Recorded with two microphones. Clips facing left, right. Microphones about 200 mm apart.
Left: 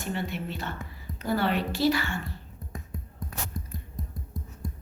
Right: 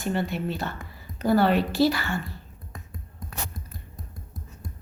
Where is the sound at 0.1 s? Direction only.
40° right (ahead or behind).